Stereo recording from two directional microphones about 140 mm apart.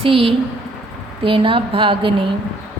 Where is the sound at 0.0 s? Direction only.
40° right (ahead or behind).